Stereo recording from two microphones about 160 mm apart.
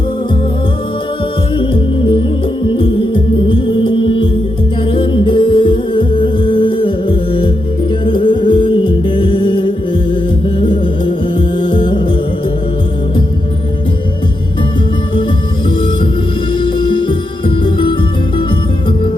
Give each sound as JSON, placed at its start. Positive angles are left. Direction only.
{"t": 1.5, "sound": "music", "side_deg": 35}
{"t": 16.6, "sound": "music", "side_deg": 30}